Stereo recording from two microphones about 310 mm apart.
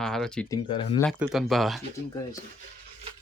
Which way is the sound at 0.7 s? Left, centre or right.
Centre.